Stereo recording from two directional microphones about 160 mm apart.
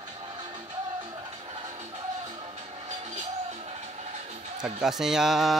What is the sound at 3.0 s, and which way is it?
Music, 40° right (ahead or behind).